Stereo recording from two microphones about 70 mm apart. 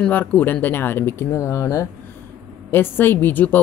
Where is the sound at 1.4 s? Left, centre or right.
Left.